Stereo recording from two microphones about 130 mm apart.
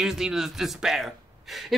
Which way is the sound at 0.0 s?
5° right (ahead or behind).